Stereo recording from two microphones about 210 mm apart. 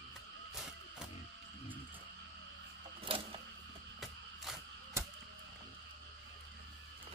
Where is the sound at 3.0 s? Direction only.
25° right (ahead or behind).